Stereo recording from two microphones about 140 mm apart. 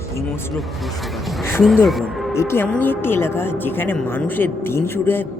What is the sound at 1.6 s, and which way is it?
Speech, centre (ahead or behind).